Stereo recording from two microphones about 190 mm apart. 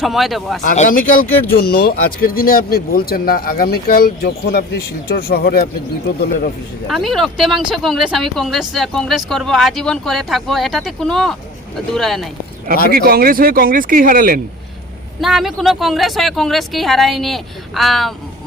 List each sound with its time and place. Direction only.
0.0 s speech: centre (ahead or behind)
0.6 s speech: 45° left (ahead or behind)
6.8 s speech: centre (ahead or behind)
12.9 s speech: 55° right (ahead or behind)
15.2 s speech: centre (ahead or behind)